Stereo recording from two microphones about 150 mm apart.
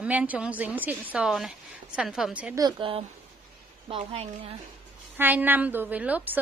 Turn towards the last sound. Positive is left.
turn(degrees=-10)  # may be behind; listen again after turning